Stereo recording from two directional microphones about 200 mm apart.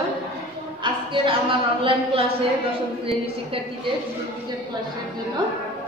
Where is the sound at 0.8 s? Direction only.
25° right (ahead or behind).